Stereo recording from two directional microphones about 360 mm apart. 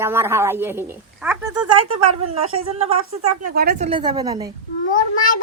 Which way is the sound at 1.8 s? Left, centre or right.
Right.